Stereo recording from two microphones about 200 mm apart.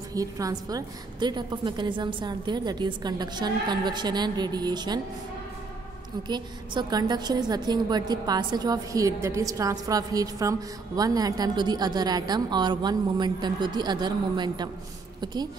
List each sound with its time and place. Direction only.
0.1 s a woman's voice: 15° right (ahead or behind)
6.2 s a woman's voice: 20° right (ahead or behind)